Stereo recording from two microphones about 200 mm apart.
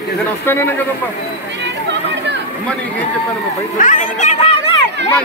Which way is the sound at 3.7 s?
40° left (ahead or behind).